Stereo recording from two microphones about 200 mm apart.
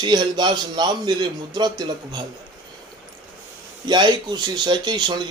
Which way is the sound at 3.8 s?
20° right (ahead or behind).